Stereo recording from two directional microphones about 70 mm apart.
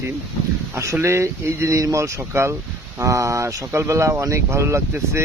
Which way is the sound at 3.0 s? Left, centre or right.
Right.